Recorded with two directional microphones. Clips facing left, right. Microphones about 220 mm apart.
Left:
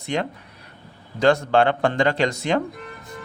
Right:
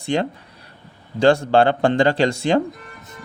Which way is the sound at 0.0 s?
30° right (ahead or behind).